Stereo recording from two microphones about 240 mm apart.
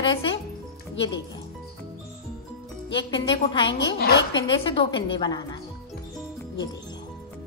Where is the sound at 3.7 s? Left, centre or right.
Left.